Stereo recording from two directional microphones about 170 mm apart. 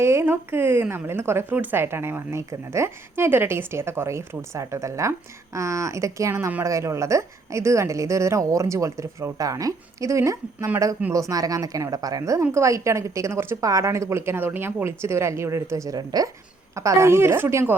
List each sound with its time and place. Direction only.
0.0 s speech: 15° right (ahead or behind)